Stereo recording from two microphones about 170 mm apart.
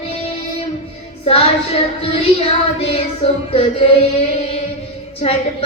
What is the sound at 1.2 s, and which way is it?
Music, 35° left (ahead or behind).